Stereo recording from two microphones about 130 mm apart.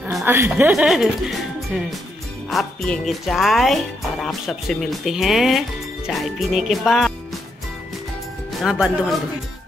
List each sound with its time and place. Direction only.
0.2 s speech: 20° right (ahead or behind)
0.7 s speech: 5° right (ahead or behind)
2.5 s speech: centre (ahead or behind)
8.5 s speech: 5° right (ahead or behind)